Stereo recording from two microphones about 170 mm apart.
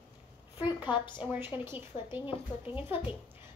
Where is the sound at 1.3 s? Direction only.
10° right (ahead or behind).